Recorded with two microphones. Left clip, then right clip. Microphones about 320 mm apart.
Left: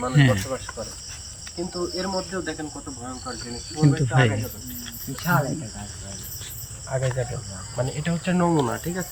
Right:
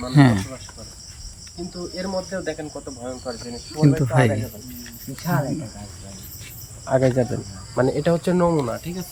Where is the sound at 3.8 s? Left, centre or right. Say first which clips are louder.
Right 3 dB; centre.